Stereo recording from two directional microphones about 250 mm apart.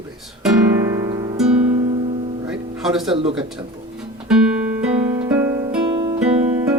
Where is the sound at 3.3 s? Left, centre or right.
Centre.